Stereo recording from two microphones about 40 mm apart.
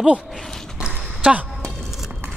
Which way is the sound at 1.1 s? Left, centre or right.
Right.